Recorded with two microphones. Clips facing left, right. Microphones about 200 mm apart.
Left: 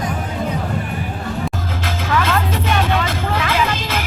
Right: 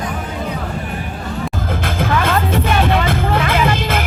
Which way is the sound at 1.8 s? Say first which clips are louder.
Right 2 dB; 55° right (ahead or behind).